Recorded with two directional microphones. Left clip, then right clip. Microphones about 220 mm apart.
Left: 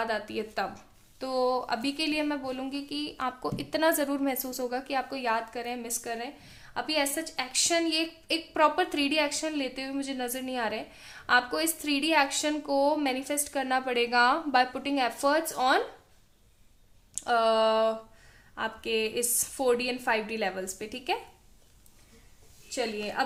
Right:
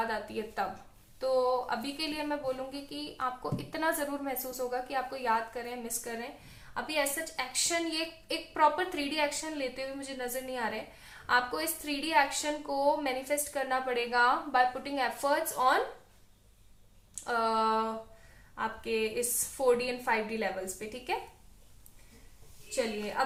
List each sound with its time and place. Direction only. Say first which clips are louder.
0.1 s a woman's voice: left 4 dB; 50° left (ahead or behind)
17.2 s a woman's voice: left 5 dB; 45° left (ahead or behind)